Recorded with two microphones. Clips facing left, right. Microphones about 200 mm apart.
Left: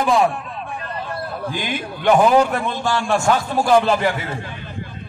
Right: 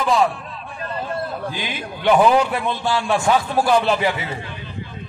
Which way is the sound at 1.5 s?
50° left (ahead or behind).